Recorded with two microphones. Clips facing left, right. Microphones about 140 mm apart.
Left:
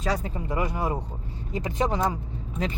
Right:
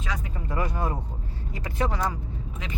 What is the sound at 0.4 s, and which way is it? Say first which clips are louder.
Speech: even; 15° left (ahead or behind).